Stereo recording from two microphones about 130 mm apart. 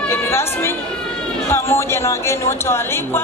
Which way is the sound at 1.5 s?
20° left (ahead or behind).